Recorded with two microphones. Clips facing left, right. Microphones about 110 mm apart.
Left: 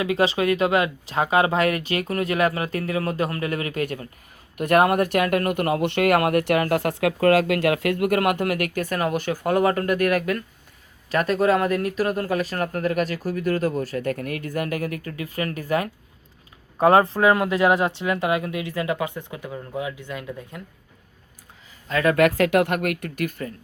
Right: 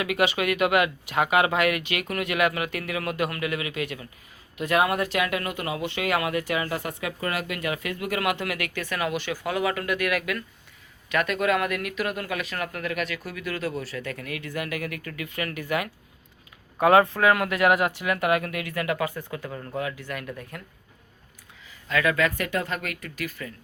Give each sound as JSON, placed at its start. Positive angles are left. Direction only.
{"t": 0.0, "sound": "speech", "side_deg": 30}
{"t": 21.8, "sound": "speech", "side_deg": 35}
{"t": 22.1, "sound": "speech", "side_deg": 75}